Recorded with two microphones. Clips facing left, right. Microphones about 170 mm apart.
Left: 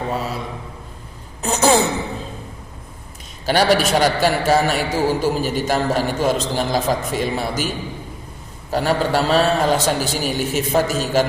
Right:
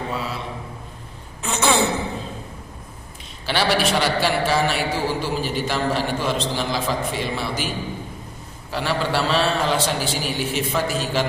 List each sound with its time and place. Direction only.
0.1 s a man's voice: 45° left (ahead or behind)
1.4 s a sound: 40° left (ahead or behind)
3.4 s a man's voice: 45° left (ahead or behind)
8.7 s a man's voice: 45° left (ahead or behind)